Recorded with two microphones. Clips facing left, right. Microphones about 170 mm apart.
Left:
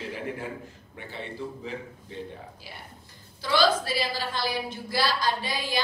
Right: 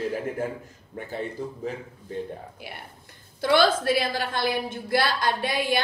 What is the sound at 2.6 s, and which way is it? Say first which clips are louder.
A woman's voice: right 4 dB; 60° right (ahead or behind).